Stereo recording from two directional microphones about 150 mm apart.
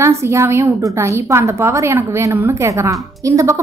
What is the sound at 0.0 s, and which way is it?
A woman's voice, 20° right (ahead or behind).